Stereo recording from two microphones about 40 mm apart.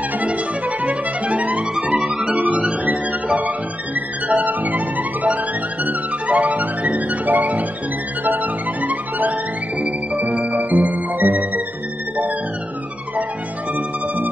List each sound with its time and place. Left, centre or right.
0.2 s music: right
2.0 s music: centre
2.2 s music: right
9.8 s music: right
10.4 s music: right
13.7 s music: right